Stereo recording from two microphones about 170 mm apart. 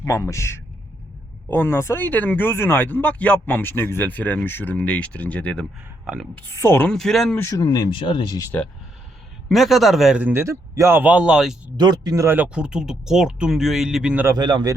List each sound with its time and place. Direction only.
0.0 s speech: 20° left (ahead or behind); by 7.3 s centre (ahead or behind)
7.3 s speech: 15° left (ahead or behind)
9.5 s speech: centre (ahead or behind)
11.8 s speech: 25° right (ahead or behind); by 14.3 s 10° right (ahead or behind)
14.3 s speech: 25° right (ahead or behind)